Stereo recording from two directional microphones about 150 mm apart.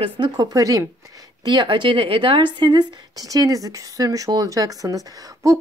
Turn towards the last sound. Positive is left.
turn(degrees=-25)  # may be behind; listen again after turning